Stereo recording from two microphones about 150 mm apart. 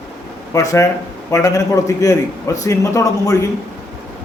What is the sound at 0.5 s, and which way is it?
A man's voice, 20° left (ahead or behind).